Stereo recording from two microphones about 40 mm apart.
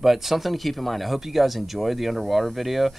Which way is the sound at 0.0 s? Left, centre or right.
Centre.